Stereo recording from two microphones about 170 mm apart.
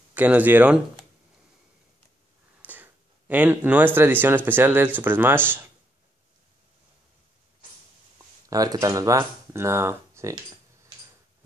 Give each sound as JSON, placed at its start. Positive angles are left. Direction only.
{"t": 0.1, "sound": "speech", "side_deg": -10}
{"t": 2.6, "sound": "speech", "side_deg": -10}
{"t": 8.5, "sound": "speech", "side_deg": -20}